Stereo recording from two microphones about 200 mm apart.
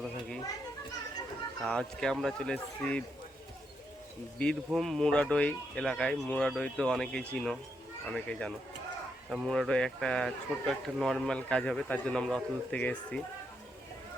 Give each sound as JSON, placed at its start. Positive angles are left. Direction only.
{"t": 1.6, "sound": "speech", "side_deg": 5}
{"t": 4.4, "sound": "speech", "side_deg": 5}